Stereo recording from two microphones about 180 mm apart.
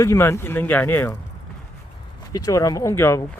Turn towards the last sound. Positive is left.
turn(degrees=15)  # may be behind; listen again after turning